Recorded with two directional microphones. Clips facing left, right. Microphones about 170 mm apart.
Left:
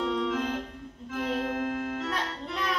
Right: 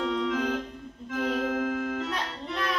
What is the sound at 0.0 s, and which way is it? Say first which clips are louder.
Organ: right 1 dB; centre (ahead or behind).